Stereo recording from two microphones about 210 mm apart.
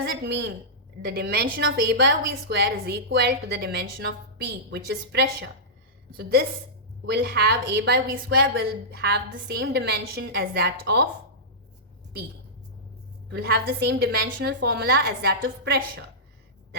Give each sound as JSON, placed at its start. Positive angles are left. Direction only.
{"t": 0.0, "sound": "a woman's voice", "side_deg": -55}
{"t": 13.3, "sound": "a woman's voice", "side_deg": -50}